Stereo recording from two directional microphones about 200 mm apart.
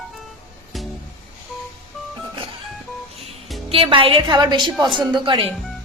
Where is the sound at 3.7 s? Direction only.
25° right (ahead or behind).